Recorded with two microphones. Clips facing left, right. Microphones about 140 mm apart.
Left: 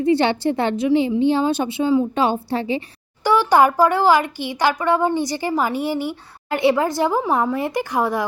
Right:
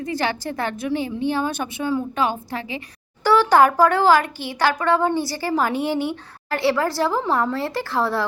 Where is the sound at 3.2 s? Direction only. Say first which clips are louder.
Even; 15° left (ahead or behind).